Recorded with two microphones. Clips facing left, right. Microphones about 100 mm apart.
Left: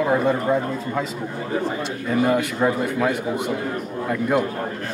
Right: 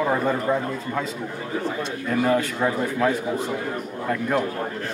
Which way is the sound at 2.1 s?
5° left (ahead or behind).